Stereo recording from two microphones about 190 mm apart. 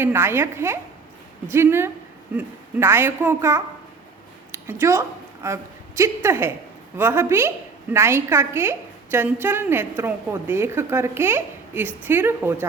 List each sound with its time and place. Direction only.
0.0 s a woman's voice: 10° right (ahead or behind)